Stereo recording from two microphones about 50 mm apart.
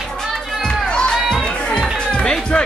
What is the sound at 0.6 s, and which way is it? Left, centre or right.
Crowd, centre.